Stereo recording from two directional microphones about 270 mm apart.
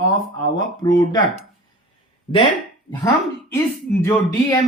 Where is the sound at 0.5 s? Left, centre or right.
Centre.